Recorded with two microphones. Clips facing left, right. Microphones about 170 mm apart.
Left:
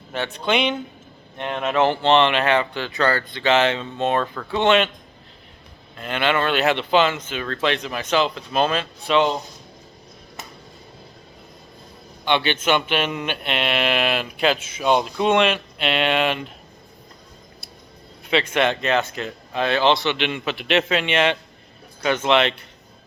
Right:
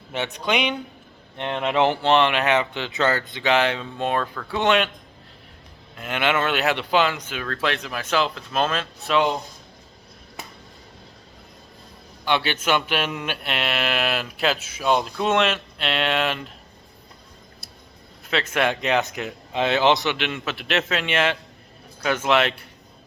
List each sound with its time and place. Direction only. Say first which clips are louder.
0.1 s speech: left 1 dB; 20° right (ahead or behind)
0.4 s speech: left 3 dB; 10° right (ahead or behind)
6.0 s speech: left 1 dB; 10° right (ahead or behind)
12.2 s speech: left 2 dB; 5° right (ahead or behind)
18.3 s speech: left 3 dB; centre (ahead or behind)
20.1 s speech: left 3 dB; centre (ahead or behind)